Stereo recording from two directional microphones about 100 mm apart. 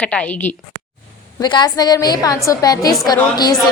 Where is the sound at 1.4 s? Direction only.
45° left (ahead or behind).